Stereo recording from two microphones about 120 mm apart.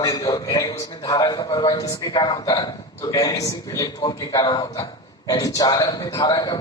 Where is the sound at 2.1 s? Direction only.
40° left (ahead or behind).